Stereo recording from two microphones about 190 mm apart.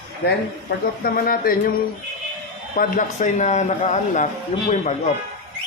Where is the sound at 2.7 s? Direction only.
45° left (ahead or behind).